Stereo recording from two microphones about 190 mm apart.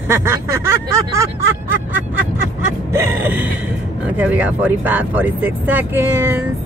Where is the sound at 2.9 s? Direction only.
15° right (ahead or behind).